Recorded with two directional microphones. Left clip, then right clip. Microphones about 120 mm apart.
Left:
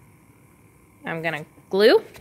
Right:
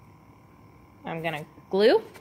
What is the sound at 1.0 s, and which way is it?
A woman's voice, 40° left (ahead or behind).